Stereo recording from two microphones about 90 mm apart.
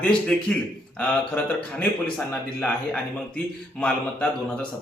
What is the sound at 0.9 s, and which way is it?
Speech, 15° left (ahead or behind).